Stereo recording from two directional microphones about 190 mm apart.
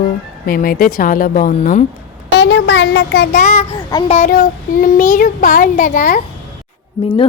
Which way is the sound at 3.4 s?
40° left (ahead or behind).